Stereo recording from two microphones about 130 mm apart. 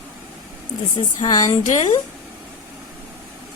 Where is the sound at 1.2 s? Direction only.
30° left (ahead or behind).